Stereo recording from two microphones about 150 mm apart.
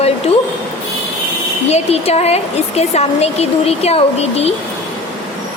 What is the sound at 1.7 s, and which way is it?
A woman's voice, 45° left (ahead or behind).